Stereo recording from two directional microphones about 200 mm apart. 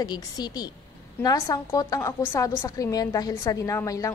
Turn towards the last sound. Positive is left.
turn(degrees=15)  # may be behind; listen again after turning